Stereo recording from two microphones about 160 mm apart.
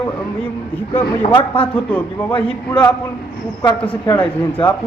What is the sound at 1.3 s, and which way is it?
Speech, 35° left (ahead or behind).